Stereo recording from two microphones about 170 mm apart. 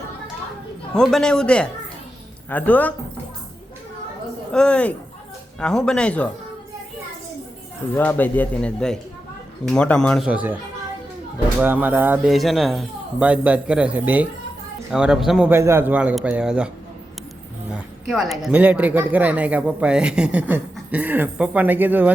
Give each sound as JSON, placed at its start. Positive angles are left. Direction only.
{"t": 0.9, "sound": "a man's voice", "side_deg": 5}
{"t": 4.5, "sound": "a man's voice", "side_deg": 5}
{"t": 7.9, "sound": "a man's voice", "side_deg": 10}
{"t": 10.2, "sound": "speech", "side_deg": -10}
{"t": 11.6, "sound": "speech", "side_deg": -10}
{"t": 12.3, "sound": "speech", "side_deg": 0}
{"t": 17.7, "sound": "speech", "side_deg": -5}